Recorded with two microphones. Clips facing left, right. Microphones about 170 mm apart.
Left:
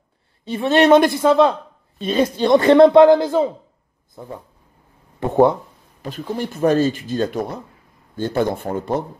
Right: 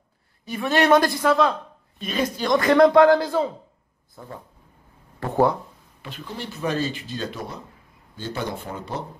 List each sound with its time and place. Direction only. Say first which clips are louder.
0.5 s a man's voice: left 5 dB; 25° left (ahead or behind)
6.0 s speech: left 9 dB; 45° left (ahead or behind)